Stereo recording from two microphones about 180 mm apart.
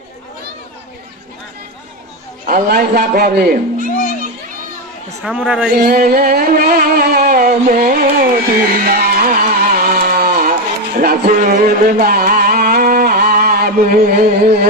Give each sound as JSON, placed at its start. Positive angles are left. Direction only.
{"t": 2.5, "sound": "a man's voice", "side_deg": -60}
{"t": 5.2, "sound": "a man's voice", "side_deg": -5}
{"t": 5.7, "sound": "a sound", "side_deg": -55}
{"t": 8.2, "sound": "music", "side_deg": -50}